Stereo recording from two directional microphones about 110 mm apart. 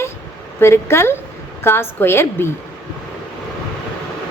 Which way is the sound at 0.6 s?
25° left (ahead or behind).